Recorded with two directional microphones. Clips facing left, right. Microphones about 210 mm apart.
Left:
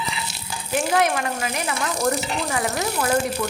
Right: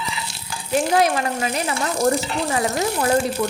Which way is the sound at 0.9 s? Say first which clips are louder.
Right 1 dB; 30° right (ahead or behind).